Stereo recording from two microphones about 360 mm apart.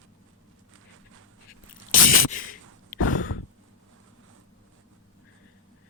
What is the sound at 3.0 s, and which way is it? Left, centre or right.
Sigh, left.